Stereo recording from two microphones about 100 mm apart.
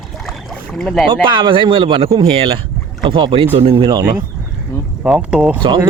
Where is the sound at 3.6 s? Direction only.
70° right (ahead or behind).